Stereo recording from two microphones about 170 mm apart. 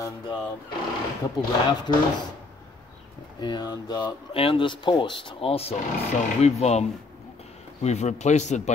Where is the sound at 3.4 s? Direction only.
25° left (ahead or behind); by 8.7 s 40° left (ahead or behind).